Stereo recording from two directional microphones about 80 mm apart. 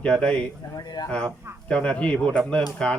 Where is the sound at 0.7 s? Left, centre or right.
Left.